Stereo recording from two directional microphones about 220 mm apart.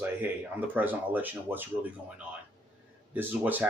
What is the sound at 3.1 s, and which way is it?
Speech, 10° right (ahead or behind).